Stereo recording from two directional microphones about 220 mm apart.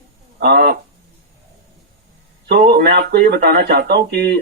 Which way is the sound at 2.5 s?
45° right (ahead or behind).